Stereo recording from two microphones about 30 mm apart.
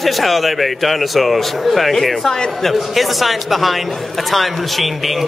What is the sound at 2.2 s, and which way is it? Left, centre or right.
Speech, left.